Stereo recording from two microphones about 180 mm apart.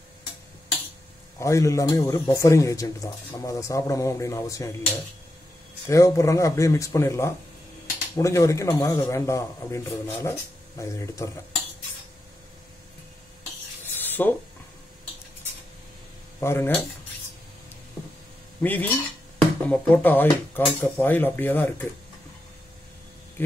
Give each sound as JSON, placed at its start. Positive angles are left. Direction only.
{"t": 1.4, "sound": "speech", "side_deg": 15}
{"t": 5.9, "sound": "speech", "side_deg": 15}
{"t": 13.9, "sound": "rub", "side_deg": 10}
{"t": 16.3, "sound": "speech", "side_deg": 15}
{"t": 18.6, "sound": "speech", "side_deg": 10}